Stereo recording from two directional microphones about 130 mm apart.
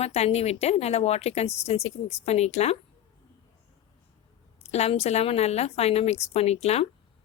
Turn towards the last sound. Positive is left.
turn(degrees=55)  # may be behind; listen again after turning